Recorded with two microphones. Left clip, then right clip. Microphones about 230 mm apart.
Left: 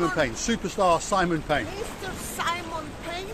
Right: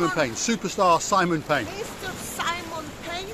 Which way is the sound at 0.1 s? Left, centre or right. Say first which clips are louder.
Right 1 dB; centre.